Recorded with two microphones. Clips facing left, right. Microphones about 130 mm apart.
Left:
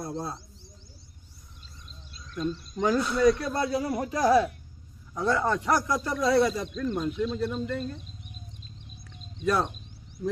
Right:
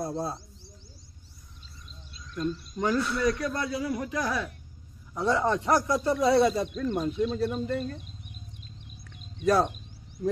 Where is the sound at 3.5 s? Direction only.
35° left (ahead or behind).